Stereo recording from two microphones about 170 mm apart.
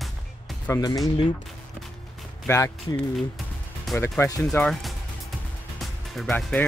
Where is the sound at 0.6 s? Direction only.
20° left (ahead or behind).